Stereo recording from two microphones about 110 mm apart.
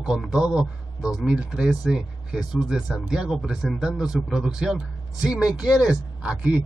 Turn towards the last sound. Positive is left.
turn(degrees=-10)  # may be behind; listen again after turning